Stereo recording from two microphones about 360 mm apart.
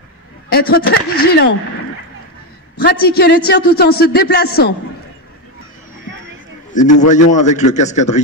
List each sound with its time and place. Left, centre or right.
0.5 s speech: left
3.1 s speech: left
6.7 s speech: left